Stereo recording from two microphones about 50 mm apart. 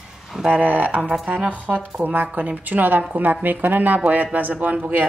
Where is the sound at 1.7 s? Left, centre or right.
Right.